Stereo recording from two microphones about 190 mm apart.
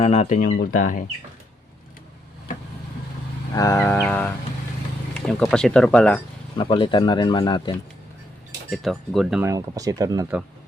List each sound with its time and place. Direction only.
0.0 s speech: 35° left (ahead or behind)
3.5 s music: 15° left (ahead or behind)
5.3 s speech: centre (ahead or behind)
6.6 s speech: 25° left (ahead or behind)
8.7 s speech: centre (ahead or behind)
9.4 s speech: 15° right (ahead or behind)